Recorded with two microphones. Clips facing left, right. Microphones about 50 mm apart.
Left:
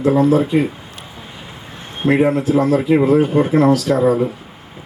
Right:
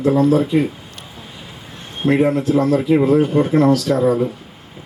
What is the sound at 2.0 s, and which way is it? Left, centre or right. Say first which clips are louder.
A man's voice: left 1 dB; centre.